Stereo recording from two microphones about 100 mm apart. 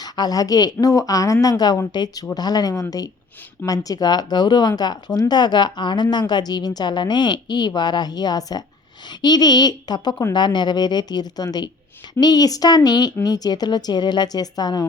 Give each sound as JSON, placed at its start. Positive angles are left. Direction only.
{"t": 0.0, "sound": "a woman's voice", "side_deg": 40}